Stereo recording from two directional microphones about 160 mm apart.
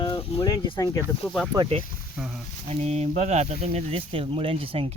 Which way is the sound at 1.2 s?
5° left (ahead or behind).